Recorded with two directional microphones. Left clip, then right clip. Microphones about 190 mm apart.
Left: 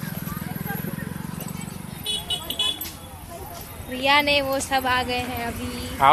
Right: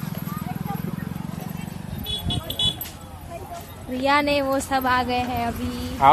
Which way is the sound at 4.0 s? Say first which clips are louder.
Left 1 dB; 45° right (ahead or behind).